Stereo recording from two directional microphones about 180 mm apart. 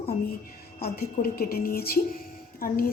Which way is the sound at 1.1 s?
55° left (ahead or behind).